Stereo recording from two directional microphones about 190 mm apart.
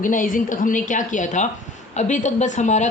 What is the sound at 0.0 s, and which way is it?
A woman's voice, 45° left (ahead or behind).